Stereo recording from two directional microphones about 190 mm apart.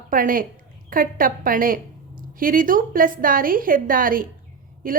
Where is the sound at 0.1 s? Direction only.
45° right (ahead or behind).